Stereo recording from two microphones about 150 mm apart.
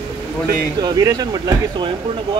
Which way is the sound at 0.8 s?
25° right (ahead or behind).